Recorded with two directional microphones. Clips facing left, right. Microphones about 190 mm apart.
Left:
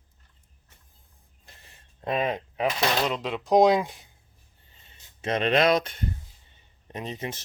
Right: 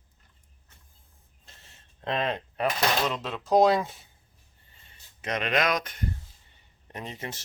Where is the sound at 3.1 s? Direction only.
10° left (ahead or behind).